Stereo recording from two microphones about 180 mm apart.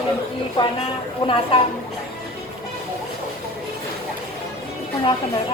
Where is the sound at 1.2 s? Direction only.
30° left (ahead or behind).